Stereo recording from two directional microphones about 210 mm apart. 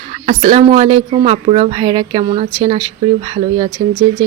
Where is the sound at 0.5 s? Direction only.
25° right (ahead or behind).